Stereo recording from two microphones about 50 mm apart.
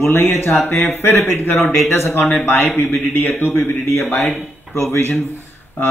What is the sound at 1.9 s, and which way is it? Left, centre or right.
Speech, left.